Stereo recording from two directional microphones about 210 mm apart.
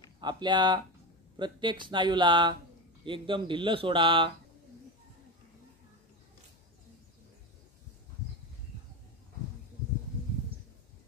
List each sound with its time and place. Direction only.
0.2 s speech: 20° right (ahead or behind)